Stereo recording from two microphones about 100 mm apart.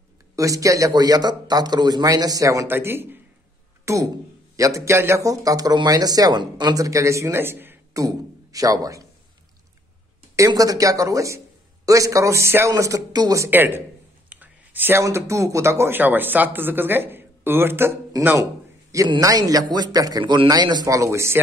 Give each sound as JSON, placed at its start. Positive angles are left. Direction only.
{"t": 0.4, "sound": "speech", "side_deg": -35}
{"t": 2.7, "sound": "speech", "side_deg": -20}
{"t": 7.9, "sound": "a man's voice", "side_deg": -35}
{"t": 10.3, "sound": "speech", "side_deg": -35}
{"t": 13.5, "sound": "speech", "side_deg": -20}
{"t": 14.3, "sound": "a sound", "side_deg": -15}
{"t": 15.0, "sound": "speech", "side_deg": -30}
{"t": 18.4, "sound": "a sound", "side_deg": -35}
{"t": 19.1, "sound": "speech", "side_deg": -35}
{"t": 20.9, "sound": "speech", "side_deg": -30}